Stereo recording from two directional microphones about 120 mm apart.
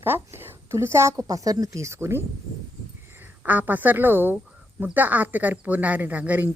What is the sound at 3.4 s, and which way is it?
A woman's voice, 15° right (ahead or behind).